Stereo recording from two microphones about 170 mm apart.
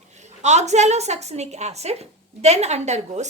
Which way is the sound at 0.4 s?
40° right (ahead or behind).